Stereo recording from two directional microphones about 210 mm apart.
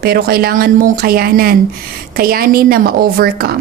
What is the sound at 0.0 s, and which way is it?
A woman's voice, 45° right (ahead or behind).